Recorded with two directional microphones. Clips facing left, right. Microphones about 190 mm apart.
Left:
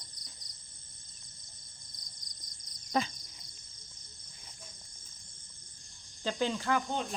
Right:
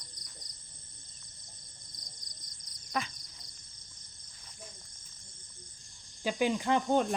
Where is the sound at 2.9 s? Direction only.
30° left (ahead or behind).